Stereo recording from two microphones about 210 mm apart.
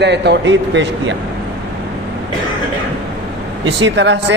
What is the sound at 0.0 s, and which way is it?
A man's voice, 55° right (ahead or behind).